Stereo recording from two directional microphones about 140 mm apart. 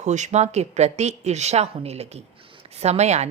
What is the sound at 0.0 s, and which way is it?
Speech, 55° right (ahead or behind).